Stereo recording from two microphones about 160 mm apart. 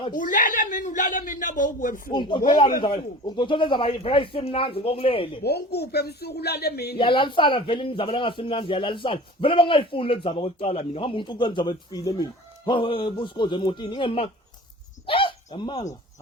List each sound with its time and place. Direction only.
0.2 s speech: 55° left (ahead or behind)
2.0 s speech: 30° left (ahead or behind)
5.4 s speech: 90° left
7.0 s speech: 30° left (ahead or behind)
15.0 s a sound: 35° left (ahead or behind)